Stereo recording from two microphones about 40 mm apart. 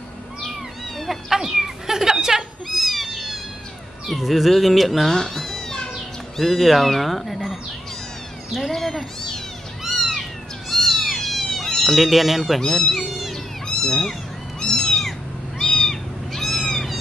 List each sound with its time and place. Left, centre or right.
1.3 s cat: centre
2.8 s cat: centre
4.1 s speech: centre
8.6 s speech: centre
9.8 s cat: centre
12.0 s speech: centre
12.6 s speech: centre
12.9 s cat: centre
13.7 s cat: centre